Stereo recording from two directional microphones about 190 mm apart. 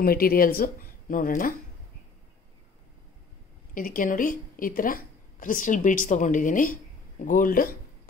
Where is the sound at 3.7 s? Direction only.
45° left (ahead or behind).